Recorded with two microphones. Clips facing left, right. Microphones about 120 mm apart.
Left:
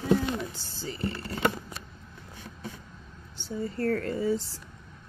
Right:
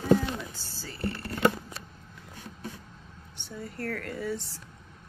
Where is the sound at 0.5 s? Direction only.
25° left (ahead or behind).